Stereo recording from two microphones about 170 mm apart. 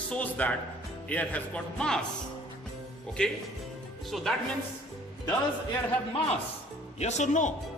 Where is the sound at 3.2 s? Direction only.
5° left (ahead or behind).